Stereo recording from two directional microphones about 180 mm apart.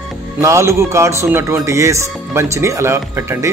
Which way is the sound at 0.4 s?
15° right (ahead or behind).